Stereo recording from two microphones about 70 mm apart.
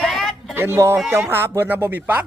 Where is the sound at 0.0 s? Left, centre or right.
Centre.